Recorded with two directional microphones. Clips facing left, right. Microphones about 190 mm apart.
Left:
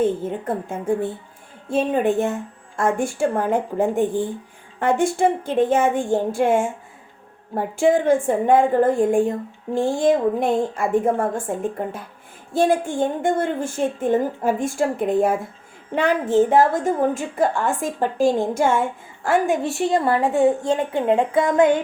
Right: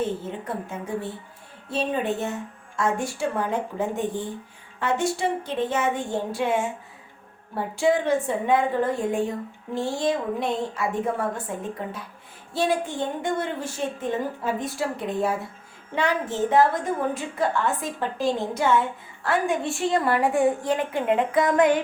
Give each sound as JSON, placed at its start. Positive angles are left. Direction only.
{"t": 0.0, "sound": "a woman's voice", "side_deg": 50}
{"t": 20.1, "sound": "a woman's voice", "side_deg": 25}